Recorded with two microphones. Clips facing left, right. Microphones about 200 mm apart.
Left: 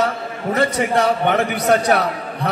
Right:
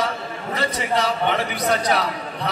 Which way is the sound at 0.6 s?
55° left (ahead or behind).